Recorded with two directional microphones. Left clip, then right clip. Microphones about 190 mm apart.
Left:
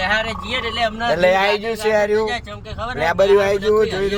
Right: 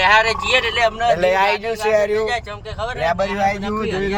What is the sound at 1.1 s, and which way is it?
A man's voice, 20° left (ahead or behind).